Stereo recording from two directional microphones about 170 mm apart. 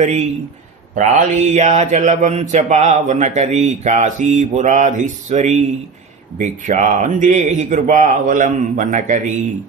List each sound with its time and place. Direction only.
0.0 s speech: 40° right (ahead or behind)